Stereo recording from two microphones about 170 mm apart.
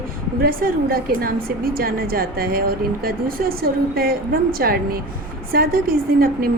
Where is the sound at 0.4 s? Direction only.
60° right (ahead or behind).